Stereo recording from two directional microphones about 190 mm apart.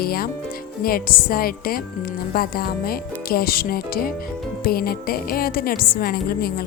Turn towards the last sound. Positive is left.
turn(degrees=50)  # may be behind; listen again after turning